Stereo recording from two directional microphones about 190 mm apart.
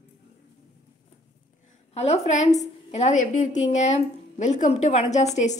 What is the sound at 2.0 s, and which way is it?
A woman's voice, 35° left (ahead or behind).